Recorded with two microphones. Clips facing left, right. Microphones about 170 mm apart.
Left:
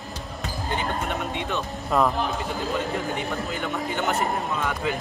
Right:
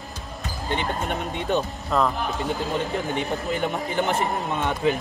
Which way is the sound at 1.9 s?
5° left (ahead or behind).